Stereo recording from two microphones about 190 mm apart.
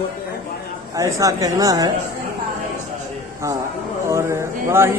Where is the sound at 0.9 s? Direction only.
15° right (ahead or behind).